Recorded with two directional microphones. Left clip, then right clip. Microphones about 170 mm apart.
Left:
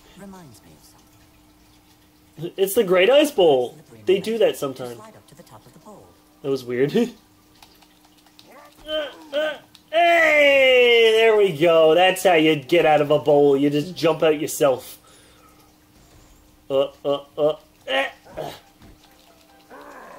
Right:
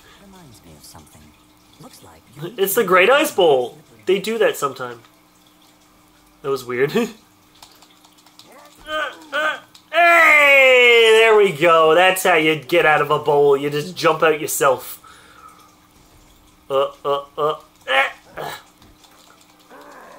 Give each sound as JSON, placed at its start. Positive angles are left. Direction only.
{"t": 2.4, "sound": "speech", "side_deg": 50}
{"t": 3.4, "sound": "speech", "side_deg": 15}
{"t": 4.0, "sound": "speech", "side_deg": 55}
{"t": 6.4, "sound": "speech", "side_deg": 55}
{"t": 8.8, "sound": "a sound", "side_deg": 55}
{"t": 11.9, "sound": "speech", "side_deg": 55}
{"t": 16.6, "sound": "speech", "side_deg": 55}
{"t": 19.7, "sound": "ratchet", "side_deg": 0}